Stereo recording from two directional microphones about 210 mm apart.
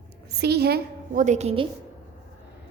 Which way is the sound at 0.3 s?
50° right (ahead or behind).